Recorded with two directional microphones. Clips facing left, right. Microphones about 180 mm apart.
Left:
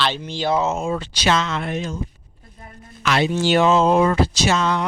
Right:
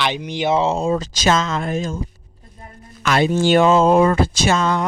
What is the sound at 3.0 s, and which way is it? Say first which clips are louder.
Speech: right 3 dB; 45° right (ahead or behind).